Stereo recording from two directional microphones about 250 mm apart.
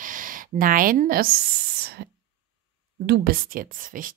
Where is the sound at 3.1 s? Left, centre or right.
Right.